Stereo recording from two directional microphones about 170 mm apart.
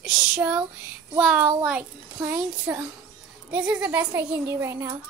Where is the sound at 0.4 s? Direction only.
10° right (ahead or behind).